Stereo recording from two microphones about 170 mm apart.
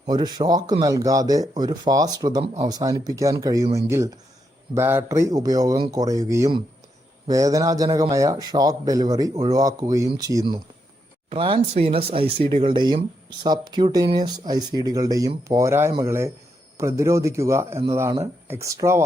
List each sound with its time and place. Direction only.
0.0 s a man's voice: 25° right (ahead or behind)